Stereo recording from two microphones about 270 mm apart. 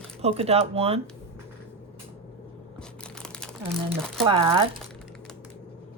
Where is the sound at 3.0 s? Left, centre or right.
Centre.